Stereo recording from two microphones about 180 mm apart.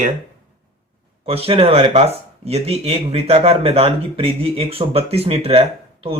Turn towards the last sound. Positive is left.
turn(degrees=-35)  # may be behind; listen again after turning